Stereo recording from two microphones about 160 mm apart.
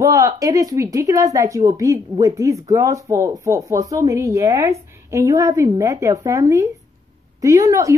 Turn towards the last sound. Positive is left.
turn(degrees=-20)  # may be behind; listen again after turning